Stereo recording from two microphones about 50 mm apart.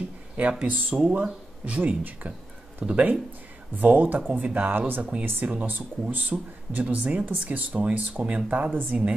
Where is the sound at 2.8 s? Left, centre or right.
Centre.